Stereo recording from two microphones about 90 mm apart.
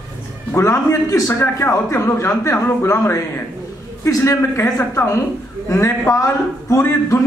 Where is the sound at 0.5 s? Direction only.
35° left (ahead or behind).